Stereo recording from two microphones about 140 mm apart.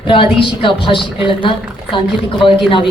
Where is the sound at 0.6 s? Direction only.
40° left (ahead or behind).